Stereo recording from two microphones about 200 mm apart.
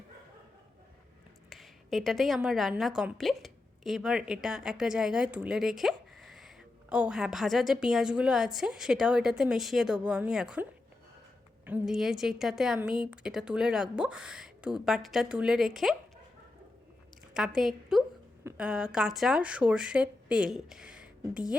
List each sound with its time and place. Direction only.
1.5 s a woman's voice: centre (ahead or behind)
17.3 s a woman's voice: 5° right (ahead or behind)